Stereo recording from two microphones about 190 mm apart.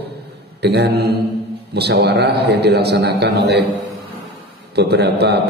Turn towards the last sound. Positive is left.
turn(degrees=-60)  # may be behind; listen again after turning